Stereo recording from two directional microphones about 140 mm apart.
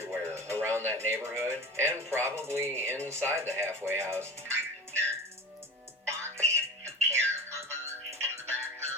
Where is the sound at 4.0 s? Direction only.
20° right (ahead or behind).